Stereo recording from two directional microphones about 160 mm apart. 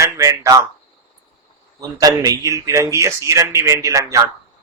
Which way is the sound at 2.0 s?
25° right (ahead or behind).